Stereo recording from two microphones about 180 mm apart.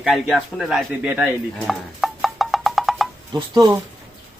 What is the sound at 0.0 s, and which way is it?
Speech, centre (ahead or behind).